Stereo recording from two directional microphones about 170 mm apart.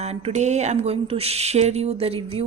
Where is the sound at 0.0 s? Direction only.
40° right (ahead or behind).